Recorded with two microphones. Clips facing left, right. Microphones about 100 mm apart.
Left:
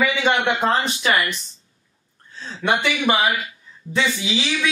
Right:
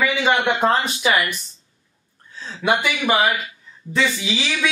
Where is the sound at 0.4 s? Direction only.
5° right (ahead or behind).